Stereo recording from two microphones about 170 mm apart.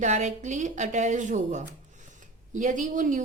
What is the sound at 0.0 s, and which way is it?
A woman's voice, 45° right (ahead or behind).